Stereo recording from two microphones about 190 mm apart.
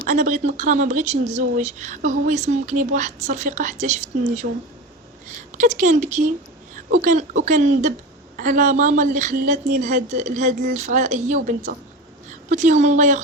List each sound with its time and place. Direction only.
0.0 s speech: 40° right (ahead or behind)
4.4 s speech: 55° right (ahead or behind)
5.5 s a woman's voice: 40° right (ahead or behind)